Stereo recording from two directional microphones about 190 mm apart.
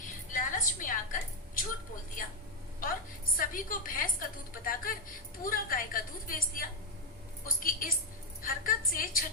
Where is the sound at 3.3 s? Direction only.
45° left (ahead or behind).